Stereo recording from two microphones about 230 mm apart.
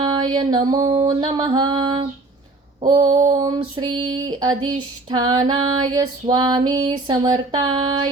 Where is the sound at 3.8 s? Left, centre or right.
Right.